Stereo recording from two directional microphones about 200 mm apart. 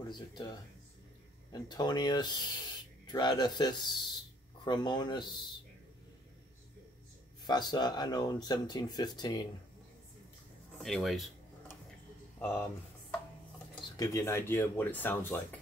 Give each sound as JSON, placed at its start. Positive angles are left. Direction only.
{"t": 0.1, "sound": "speech", "side_deg": 20}
{"t": 7.4, "sound": "speech", "side_deg": 20}
{"t": 10.8, "sound": "a sound", "side_deg": 0}
{"t": 12.4, "sound": "speech", "side_deg": 10}
{"t": 13.9, "sound": "speech", "side_deg": 15}